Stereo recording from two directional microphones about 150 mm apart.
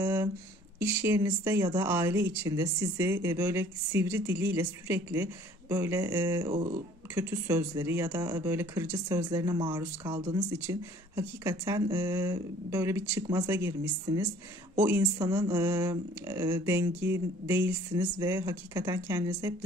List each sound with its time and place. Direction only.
0.0 s a sound: 15° right (ahead or behind)
0.7 s speech: 15° right (ahead or behind)
6.5 s speech: 35° right (ahead or behind)
7.2 s speech: 15° right (ahead or behind)
15.2 s speech: 25° right (ahead or behind)